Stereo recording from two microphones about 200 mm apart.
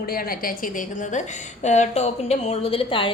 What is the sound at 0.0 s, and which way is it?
A woman's voice, 45° left (ahead or behind).